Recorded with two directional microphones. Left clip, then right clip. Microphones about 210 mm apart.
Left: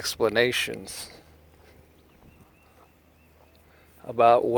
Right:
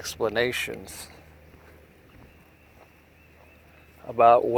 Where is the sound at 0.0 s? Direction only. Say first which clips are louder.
Left 3 dB; 50° left (ahead or behind).